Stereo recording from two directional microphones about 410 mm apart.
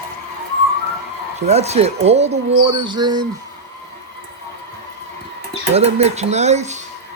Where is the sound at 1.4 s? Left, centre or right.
Centre.